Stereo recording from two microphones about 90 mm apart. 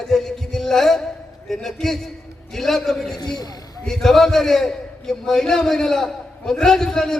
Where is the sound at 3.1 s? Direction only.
50° left (ahead or behind).